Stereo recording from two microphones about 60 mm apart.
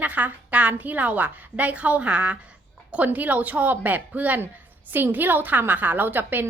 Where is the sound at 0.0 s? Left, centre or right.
Right.